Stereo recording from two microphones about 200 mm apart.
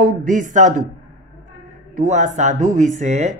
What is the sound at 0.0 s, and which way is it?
Speech, 40° right (ahead or behind).